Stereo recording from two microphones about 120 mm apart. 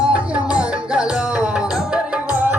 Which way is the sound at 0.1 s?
10° right (ahead or behind).